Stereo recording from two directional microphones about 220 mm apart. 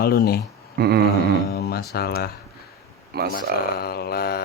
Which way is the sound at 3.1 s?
45° right (ahead or behind).